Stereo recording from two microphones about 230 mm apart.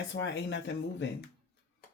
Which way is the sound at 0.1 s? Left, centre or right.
Left.